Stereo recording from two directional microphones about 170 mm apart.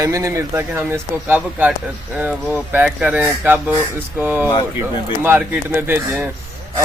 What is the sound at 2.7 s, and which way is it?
Speech, 10° right (ahead or behind).